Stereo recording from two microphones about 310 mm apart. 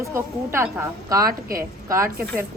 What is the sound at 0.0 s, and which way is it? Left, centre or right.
A woman's voice, centre.